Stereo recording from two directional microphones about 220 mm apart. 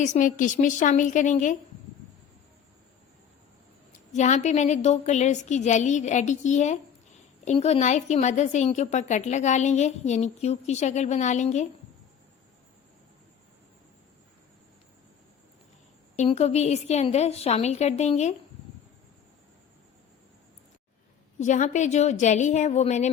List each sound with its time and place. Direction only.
0.0 s a woman's voice: 35° left (ahead or behind)
4.1 s a woman's voice: 30° left (ahead or behind)
16.1 s a woman's voice: 30° left (ahead or behind)
21.3 s a woman's voice: 35° left (ahead or behind)